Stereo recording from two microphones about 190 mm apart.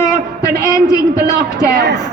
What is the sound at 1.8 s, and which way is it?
Speech, 65° right (ahead or behind).